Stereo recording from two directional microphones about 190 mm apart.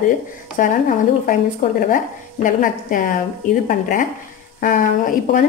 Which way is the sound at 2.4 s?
45° left (ahead or behind).